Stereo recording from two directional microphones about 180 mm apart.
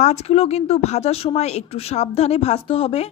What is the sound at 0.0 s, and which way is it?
A woman's voice, 35° left (ahead or behind).